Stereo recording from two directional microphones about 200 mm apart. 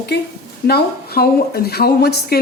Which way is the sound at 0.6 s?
50° left (ahead or behind).